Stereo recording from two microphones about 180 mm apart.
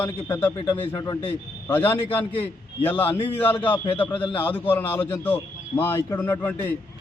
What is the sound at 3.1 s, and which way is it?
Speech, 30° left (ahead or behind).